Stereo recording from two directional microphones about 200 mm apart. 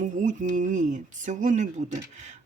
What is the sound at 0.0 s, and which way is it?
Speech, 40° right (ahead or behind).